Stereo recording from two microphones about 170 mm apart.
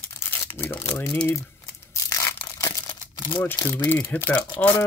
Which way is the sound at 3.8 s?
10° left (ahead or behind).